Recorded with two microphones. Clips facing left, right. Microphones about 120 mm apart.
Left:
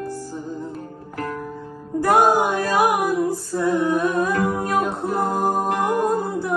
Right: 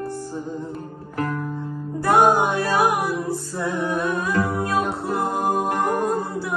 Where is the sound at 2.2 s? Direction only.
15° right (ahead or behind).